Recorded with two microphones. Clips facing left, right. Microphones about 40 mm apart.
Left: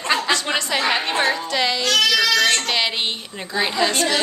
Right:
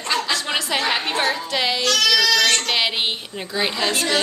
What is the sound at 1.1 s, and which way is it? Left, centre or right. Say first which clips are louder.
Music: left 1 dB; centre.